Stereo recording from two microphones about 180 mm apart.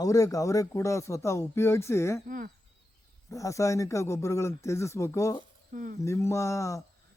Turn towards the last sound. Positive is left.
turn(degrees=15)  # may be behind; listen again after turning